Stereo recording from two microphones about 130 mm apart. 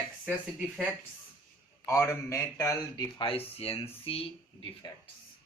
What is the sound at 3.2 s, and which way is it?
Speech, 45° left (ahead or behind).